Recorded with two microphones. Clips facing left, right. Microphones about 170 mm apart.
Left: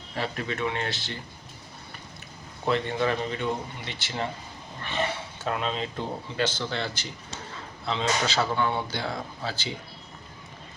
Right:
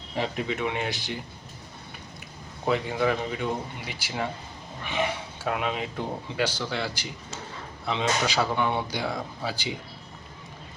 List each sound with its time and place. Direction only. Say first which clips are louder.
0.2 s speech: right 2 dB; 15° right (ahead or behind)
2.6 s speech: right 1 dB; 10° right (ahead or behind)